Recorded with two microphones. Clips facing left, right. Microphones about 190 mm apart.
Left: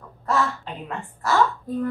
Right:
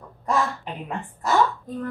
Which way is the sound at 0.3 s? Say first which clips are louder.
Even; 15° right (ahead or behind).